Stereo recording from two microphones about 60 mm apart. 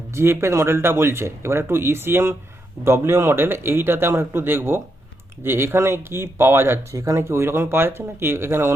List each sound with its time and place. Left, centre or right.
0.1 s speech: right
6.9 s speech: right
7.2 s speech: right